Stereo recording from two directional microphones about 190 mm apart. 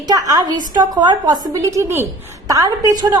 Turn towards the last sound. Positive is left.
turn(degrees=-20)  # may be behind; listen again after turning